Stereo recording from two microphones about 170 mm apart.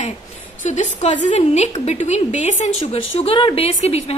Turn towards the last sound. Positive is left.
turn(degrees=35)  # may be behind; listen again after turning